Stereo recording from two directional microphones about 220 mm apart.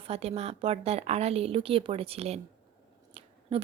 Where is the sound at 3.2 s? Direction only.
25° right (ahead or behind).